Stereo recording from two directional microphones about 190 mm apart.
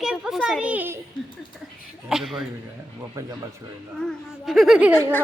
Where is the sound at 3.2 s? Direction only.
15° right (ahead or behind).